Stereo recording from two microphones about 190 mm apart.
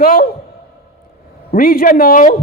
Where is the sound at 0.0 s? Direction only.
50° left (ahead or behind).